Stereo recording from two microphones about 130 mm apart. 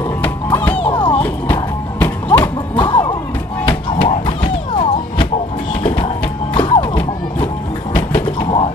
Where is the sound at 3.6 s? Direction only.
40° left (ahead or behind).